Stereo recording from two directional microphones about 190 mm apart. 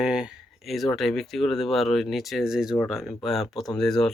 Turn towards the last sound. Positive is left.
turn(degrees=5)  # may be behind; listen again after turning